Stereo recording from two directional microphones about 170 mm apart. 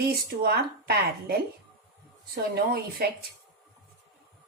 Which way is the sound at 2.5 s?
65° right (ahead or behind).